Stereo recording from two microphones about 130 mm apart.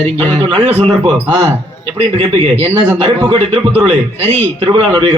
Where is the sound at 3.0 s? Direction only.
35° right (ahead or behind).